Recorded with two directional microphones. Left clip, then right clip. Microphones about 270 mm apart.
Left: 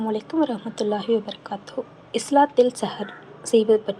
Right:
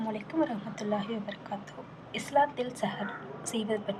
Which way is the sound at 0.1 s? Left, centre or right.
Centre.